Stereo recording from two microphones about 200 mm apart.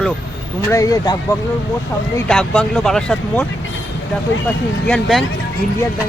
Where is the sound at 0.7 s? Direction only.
15° left (ahead or behind).